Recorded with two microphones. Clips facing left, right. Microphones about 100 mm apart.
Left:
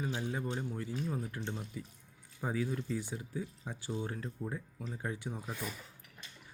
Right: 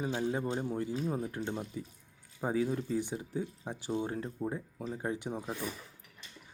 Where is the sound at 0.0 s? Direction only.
25° right (ahead or behind).